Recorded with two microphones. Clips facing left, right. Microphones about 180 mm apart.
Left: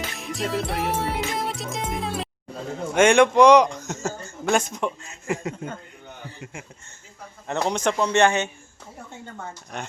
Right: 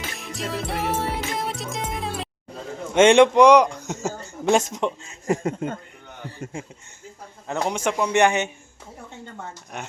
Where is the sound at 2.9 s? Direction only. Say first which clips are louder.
Right 2 dB; 20° right (ahead or behind).